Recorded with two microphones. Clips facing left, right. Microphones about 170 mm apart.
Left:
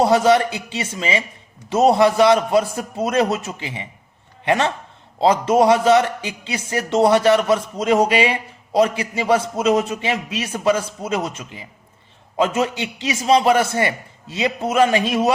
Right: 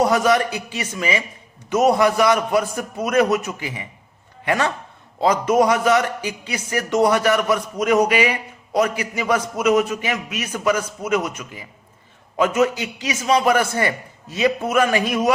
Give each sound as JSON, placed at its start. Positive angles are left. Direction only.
{"t": 0.0, "sound": "a man's voice", "side_deg": 25}